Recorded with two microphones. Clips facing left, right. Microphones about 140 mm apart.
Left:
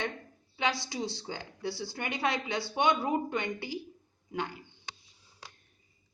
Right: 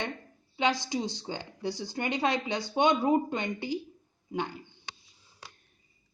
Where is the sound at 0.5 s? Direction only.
20° right (ahead or behind).